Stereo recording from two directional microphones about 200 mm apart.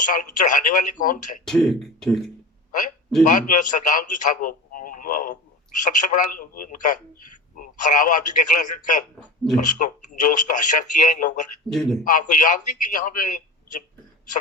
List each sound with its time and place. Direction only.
0.0 s speech: 40° left (ahead or behind)
1.5 s speech: 5° left (ahead or behind)
3.2 s a man's voice: 40° left (ahead or behind)
11.7 s speech: centre (ahead or behind)
12.0 s speech: 40° left (ahead or behind)